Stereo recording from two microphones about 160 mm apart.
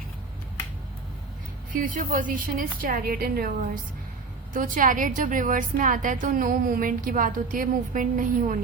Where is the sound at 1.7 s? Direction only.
60° right (ahead or behind).